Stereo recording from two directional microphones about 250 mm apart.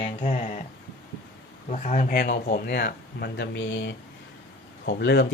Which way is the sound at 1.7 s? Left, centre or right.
Left.